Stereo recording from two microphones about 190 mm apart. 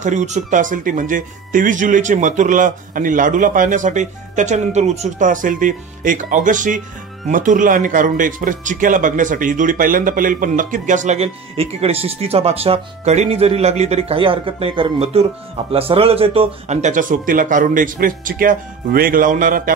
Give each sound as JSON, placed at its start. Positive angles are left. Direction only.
{"t": 0.0, "sound": "speech", "side_deg": -40}